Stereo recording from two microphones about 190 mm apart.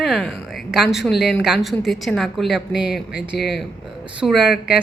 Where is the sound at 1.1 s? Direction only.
60° left (ahead or behind).